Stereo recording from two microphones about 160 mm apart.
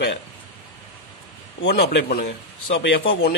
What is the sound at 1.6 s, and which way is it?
Speech, 90° left.